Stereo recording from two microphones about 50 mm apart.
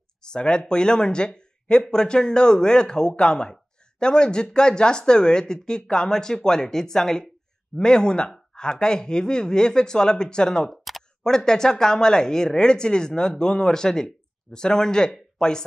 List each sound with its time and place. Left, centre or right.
0.2 s speech: centre
10.8 s camera: centre
11.2 s speech: centre